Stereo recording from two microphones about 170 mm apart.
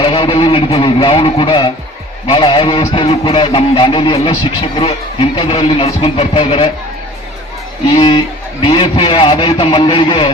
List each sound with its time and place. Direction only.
0.0 s a sound: 30° left (ahead or behind)
2.2 s music: 30° left (ahead or behind)
7.9 s music: 30° left (ahead or behind)